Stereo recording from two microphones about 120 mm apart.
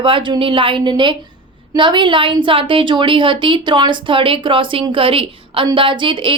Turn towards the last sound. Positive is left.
turn(degrees=-45)  # may be behind; listen again after turning